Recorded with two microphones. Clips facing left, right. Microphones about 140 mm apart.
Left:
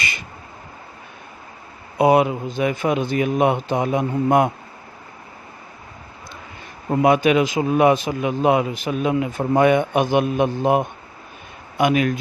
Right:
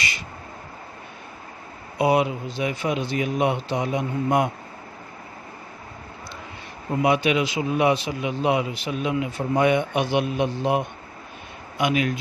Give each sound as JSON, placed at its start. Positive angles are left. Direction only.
{"t": 2.0, "sound": "a man's voice", "side_deg": 50}
{"t": 7.0, "sound": "a man's voice", "side_deg": 50}